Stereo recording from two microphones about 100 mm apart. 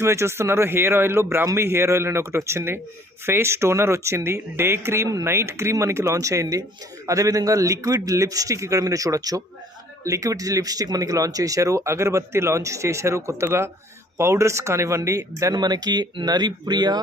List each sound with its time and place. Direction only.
0.0 s speech: 25° right (ahead or behind); by 17.0 s 45° right (ahead or behind)